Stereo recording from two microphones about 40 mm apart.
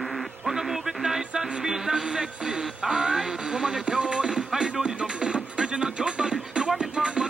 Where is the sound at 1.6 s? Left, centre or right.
Centre.